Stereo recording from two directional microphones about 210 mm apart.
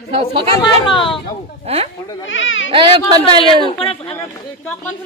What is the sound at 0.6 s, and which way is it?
Speech, 25° left (ahead or behind).